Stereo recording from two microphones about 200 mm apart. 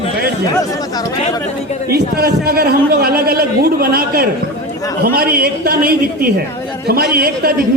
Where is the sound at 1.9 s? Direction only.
50° right (ahead or behind).